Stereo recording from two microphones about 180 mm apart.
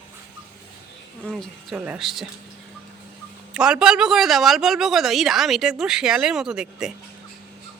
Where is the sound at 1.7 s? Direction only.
5° right (ahead or behind).